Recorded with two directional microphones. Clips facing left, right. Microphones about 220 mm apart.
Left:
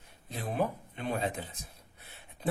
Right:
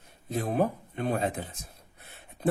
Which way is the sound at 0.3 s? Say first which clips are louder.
Right 5 dB; 45° right (ahead or behind).